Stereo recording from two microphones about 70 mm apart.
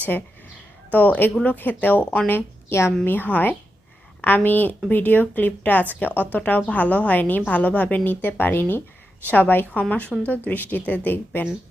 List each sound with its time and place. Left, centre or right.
0.9 s a woman's voice: left
3.0 s a woman's voice: left